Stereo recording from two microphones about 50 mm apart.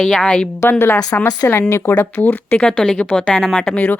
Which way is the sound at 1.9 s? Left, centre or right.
Left.